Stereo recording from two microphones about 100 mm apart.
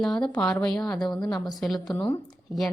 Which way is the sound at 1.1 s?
45° left (ahead or behind).